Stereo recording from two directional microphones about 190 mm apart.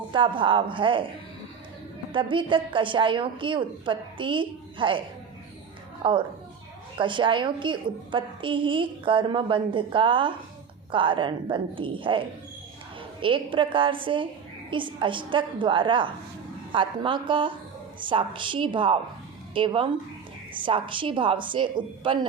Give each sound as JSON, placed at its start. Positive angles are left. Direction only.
{"t": 0.1, "sound": "a woman's voice", "side_deg": -25}
{"t": 2.1, "sound": "a woman's voice", "side_deg": -25}
{"t": 13.2, "sound": "a woman's voice", "side_deg": -25}